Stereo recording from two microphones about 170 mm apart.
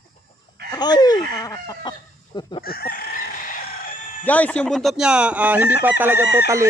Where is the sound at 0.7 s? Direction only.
25° left (ahead or behind).